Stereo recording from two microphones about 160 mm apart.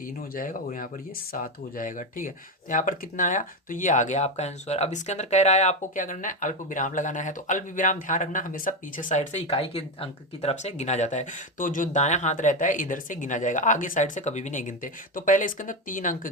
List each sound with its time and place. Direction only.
0.3 s speech: 60° left (ahead or behind)
9.5 s speech: 35° left (ahead or behind); by 16.3 s 55° left (ahead or behind)